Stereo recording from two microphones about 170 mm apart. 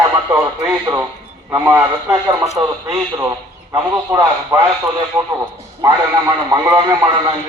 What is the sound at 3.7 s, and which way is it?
Speech, 20° right (ahead or behind).